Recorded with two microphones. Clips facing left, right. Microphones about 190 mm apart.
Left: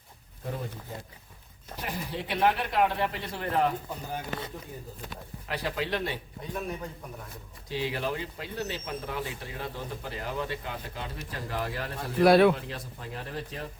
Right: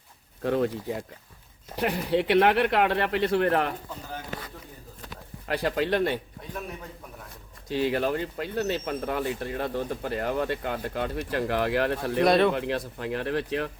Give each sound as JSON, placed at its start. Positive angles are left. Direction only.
{"t": 0.4, "sound": "speech", "side_deg": -85}
{"t": 1.7, "sound": "speech", "side_deg": -65}
{"t": 4.1, "sound": "speech", "side_deg": 25}
{"t": 5.5, "sound": "speech", "side_deg": -55}
{"t": 7.7, "sound": "speech", "side_deg": -50}
{"t": 12.2, "sound": "speech", "side_deg": 5}
{"t": 12.5, "sound": "speech", "side_deg": -65}